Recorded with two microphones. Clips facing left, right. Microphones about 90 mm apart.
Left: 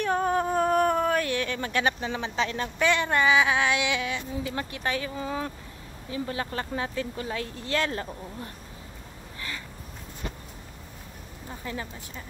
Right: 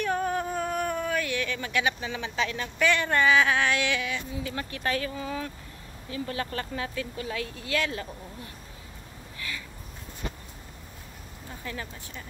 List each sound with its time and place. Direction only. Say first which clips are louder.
0.0 s speech: left 3 dB; 30° left (ahead or behind)
11.6 s speech: left 2 dB; 25° left (ahead or behind)